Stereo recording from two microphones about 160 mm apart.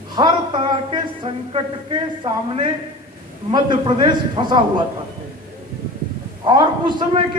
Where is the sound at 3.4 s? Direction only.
30° right (ahead or behind).